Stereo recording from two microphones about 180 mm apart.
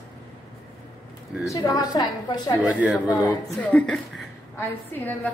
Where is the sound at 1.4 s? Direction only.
20° left (ahead or behind).